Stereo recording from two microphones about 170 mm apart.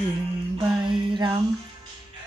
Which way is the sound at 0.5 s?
30° right (ahead or behind).